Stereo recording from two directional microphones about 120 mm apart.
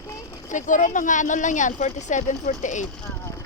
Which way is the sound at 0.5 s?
90° left.